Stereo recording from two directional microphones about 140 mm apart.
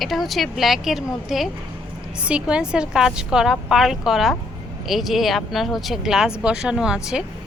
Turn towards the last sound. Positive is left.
turn(degrees=-5)  # may be behind; listen again after turning